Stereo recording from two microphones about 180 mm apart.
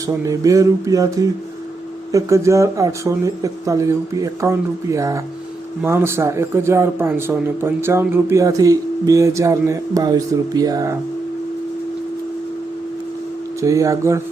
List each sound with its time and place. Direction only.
0.3 s a sound: 20° right (ahead or behind)
2.1 s speech: 15° right (ahead or behind)
13.6 s speech: 15° right (ahead or behind)